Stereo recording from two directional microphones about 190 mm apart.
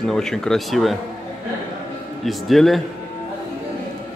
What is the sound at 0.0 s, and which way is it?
Speech, 5° left (ahead or behind).